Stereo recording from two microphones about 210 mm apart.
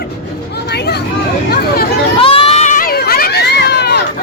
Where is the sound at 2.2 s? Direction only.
25° left (ahead or behind); by 4.0 s 50° left (ahead or behind).